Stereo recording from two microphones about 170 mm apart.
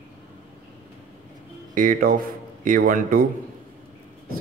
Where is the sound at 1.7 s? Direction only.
55° right (ahead or behind).